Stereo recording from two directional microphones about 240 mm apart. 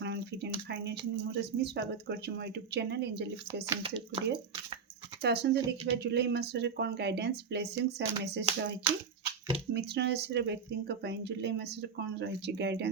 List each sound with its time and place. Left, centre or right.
0.0 s speech: right
3.8 s speech: right
5.2 s speech: right
9.7 s speech: right